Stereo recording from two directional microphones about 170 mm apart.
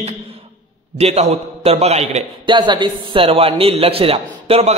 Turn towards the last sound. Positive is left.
turn(degrees=-35)  # may be behind; listen again after turning